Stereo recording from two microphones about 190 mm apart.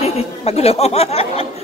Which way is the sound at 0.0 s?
35° left (ahead or behind).